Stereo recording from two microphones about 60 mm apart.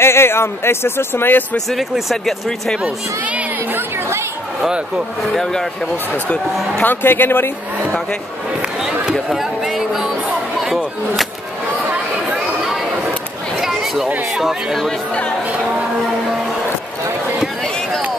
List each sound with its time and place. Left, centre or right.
0.0 s speech: left
1.7 s speech: centre
2.8 s speech: right
5.2 s speech: centre
6.1 s speech: left
9.1 s a sound: centre
13.6 s a sound: centre
14.4 s speech: centre